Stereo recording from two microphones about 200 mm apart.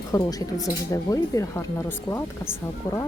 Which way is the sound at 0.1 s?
20° left (ahead or behind).